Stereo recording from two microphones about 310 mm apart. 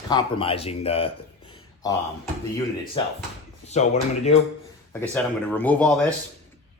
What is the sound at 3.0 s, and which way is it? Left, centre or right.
Speech, centre.